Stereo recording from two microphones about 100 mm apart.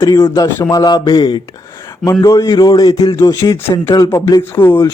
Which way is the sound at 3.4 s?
35° left (ahead or behind).